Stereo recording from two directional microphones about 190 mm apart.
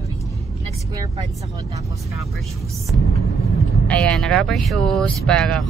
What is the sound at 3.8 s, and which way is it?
Speech, 5° left (ahead or behind).